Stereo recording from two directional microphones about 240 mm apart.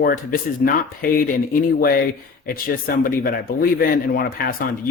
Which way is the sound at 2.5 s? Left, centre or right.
Left.